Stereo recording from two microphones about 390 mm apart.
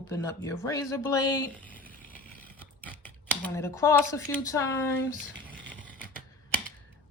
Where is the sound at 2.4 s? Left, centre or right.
Centre.